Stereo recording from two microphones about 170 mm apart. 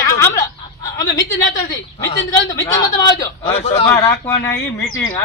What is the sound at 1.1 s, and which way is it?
Speech, 20° left (ahead or behind).